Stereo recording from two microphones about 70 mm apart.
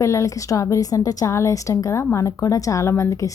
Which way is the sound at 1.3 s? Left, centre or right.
Left.